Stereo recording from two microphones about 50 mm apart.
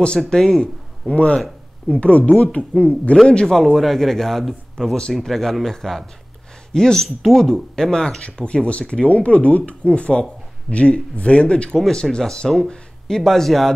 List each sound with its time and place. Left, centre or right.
0.3 s speech: centre
3.5 s speech: centre
8.2 s speech: left; by 13.7 s centre